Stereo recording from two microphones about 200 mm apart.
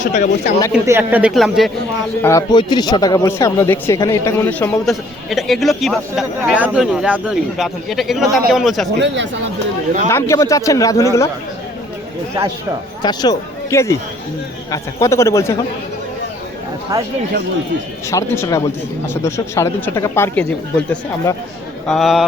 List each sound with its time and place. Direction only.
0.0 s speech: 35° left (ahead or behind)
0.7 s speech: 10° right (ahead or behind)
2.2 s speech: 20° left (ahead or behind); by 8.9 s centre (ahead or behind)
9.0 s speech: 65° right (ahead or behind)
10.1 s speech: 15° left (ahead or behind)
13.0 s speech: 20° left (ahead or behind)
16.9 s speech: 15° right (ahead or behind)
18.1 s speech: 15° left (ahead or behind)